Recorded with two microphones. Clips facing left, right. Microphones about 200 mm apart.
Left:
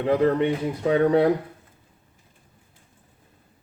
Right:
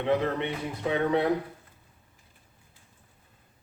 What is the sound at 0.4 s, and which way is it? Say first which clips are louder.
Speech: left 8 dB; 45° left (ahead or behind).